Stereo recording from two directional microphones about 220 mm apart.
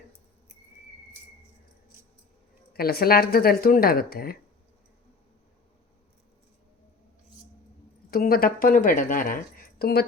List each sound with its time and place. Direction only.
2.7 s speech: 45° left (ahead or behind)
8.1 s a woman's voice: 40° left (ahead or behind)